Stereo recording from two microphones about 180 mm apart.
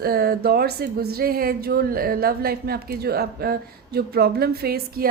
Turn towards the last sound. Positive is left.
turn(degrees=-60)  # may be behind; listen again after turning